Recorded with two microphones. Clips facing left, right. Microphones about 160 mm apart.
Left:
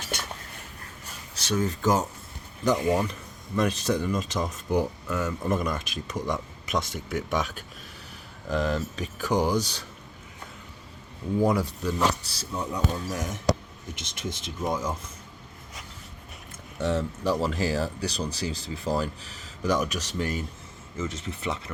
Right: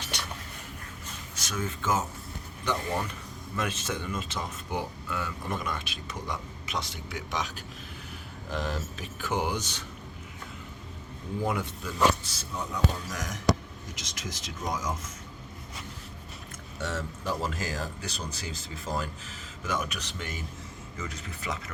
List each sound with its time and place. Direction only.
1.4 s speech: 35° left (ahead or behind); by 7.6 s 50° left (ahead or behind)
8.4 s speech: 40° left (ahead or behind)
11.4 s speech: 40° left (ahead or behind)
16.8 s speech: 30° left (ahead or behind)
21.0 s speech: 25° left (ahead or behind)